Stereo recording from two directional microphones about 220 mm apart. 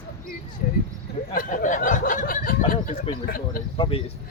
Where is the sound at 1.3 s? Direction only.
40° left (ahead or behind).